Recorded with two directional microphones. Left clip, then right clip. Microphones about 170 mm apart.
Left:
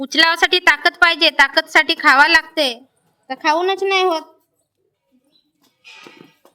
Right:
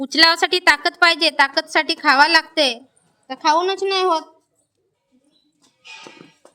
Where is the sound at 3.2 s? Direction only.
20° left (ahead or behind).